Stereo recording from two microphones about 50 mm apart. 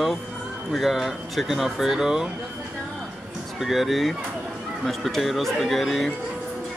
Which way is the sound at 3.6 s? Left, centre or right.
Centre.